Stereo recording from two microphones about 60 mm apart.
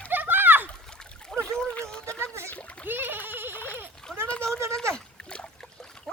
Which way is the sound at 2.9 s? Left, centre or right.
Right.